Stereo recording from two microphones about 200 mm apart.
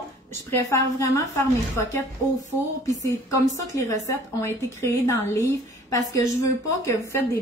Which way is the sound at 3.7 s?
15° left (ahead or behind).